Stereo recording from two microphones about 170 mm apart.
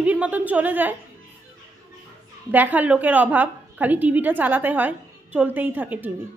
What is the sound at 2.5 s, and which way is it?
A woman's voice, 10° right (ahead or behind).